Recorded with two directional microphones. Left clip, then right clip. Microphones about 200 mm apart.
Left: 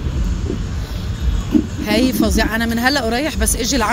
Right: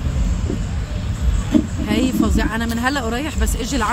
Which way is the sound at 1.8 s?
20° left (ahead or behind).